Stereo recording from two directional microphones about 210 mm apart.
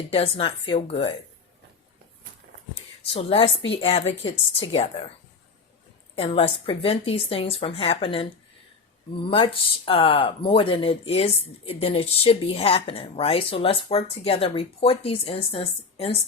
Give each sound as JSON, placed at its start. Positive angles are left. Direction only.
{"t": 0.1, "sound": "speech", "side_deg": 25}
{"t": 3.1, "sound": "speech", "side_deg": 25}
{"t": 6.1, "sound": "speech", "side_deg": 25}
{"t": 9.3, "sound": "speech", "side_deg": 25}